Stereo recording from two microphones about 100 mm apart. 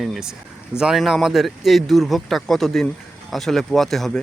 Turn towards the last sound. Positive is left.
turn(degrees=5)  # may be behind; listen again after turning